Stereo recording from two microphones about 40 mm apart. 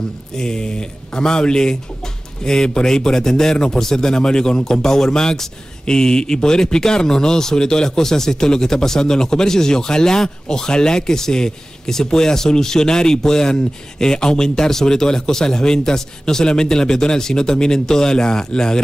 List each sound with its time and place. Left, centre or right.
0.4 s a man's voice: centre